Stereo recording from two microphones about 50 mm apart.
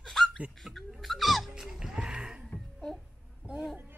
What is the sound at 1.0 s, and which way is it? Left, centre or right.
Music, centre.